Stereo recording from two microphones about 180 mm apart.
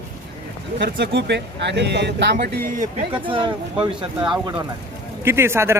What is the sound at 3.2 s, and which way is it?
Speech, 30° right (ahead or behind).